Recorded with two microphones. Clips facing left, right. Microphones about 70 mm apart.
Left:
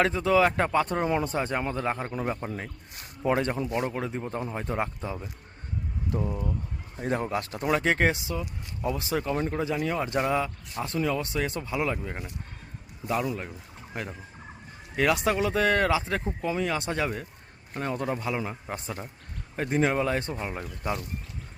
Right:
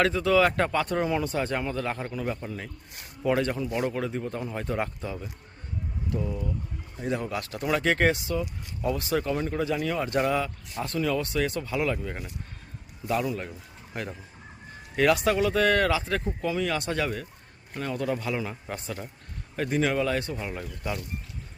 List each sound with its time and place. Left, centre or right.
0.0 s speech: centre
6.1 s speech: left
7.3 s speech: left; by 13.5 s centre
13.9 s fowl: centre
14.9 s speech: centre